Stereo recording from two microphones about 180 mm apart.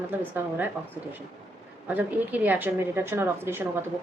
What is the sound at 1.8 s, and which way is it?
A woman's voice, 10° right (ahead or behind).